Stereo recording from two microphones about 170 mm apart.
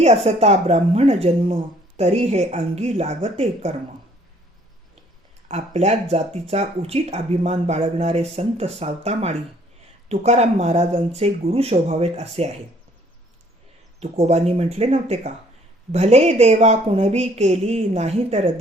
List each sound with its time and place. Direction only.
0.0 s speech: 40° right (ahead or behind)
5.5 s speech: 40° right (ahead or behind)
14.0 s speech: 40° right (ahead or behind)